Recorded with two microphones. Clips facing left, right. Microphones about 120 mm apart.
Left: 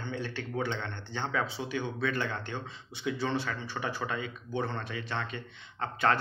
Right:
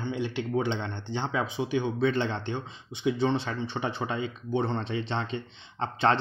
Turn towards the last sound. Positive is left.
turn(degrees=-25)  # may be behind; listen again after turning